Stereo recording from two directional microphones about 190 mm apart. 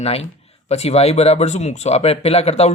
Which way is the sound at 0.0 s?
30° left (ahead or behind).